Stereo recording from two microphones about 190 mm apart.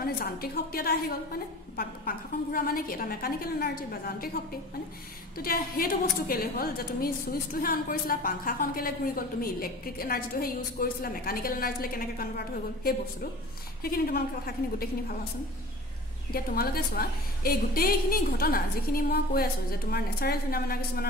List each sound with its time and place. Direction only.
0.0 s a woman's voice: 50° left (ahead or behind)
16.3 s a woman's voice: 50° left (ahead or behind)